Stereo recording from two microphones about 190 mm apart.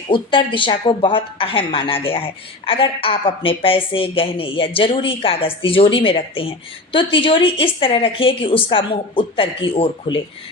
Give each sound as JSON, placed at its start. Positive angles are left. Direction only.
{"t": 0.1, "sound": "speech", "side_deg": 25}